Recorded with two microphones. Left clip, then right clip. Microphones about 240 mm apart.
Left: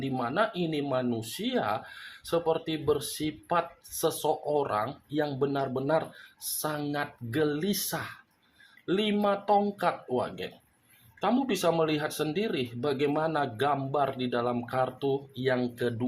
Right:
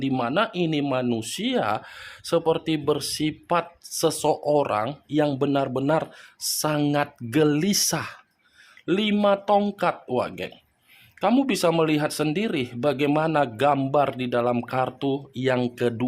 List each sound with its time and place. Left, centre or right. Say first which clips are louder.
0.0 s speech: right 5 dB; right